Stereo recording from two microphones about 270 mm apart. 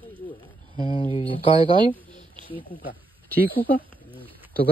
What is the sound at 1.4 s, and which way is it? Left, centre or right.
Speech, centre.